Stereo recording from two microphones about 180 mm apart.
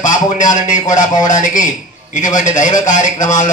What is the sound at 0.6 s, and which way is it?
A man's voice, 45° left (ahead or behind).